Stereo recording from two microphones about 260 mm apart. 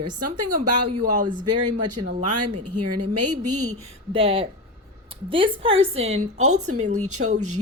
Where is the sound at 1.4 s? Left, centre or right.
Right.